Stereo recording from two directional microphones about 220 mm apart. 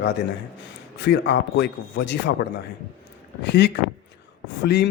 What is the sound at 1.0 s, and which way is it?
Speech, 55° left (ahead or behind).